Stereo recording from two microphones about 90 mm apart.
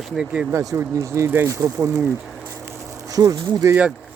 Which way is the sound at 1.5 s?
40° right (ahead or behind).